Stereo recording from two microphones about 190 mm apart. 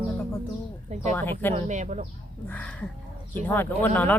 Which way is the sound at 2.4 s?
10° left (ahead or behind).